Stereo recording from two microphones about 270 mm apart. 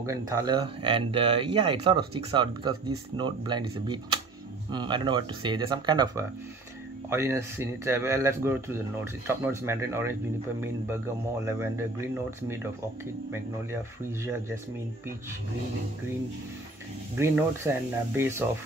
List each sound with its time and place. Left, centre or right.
0.0 s speech: centre
11.4 s speech: centre
17.2 s speech: centre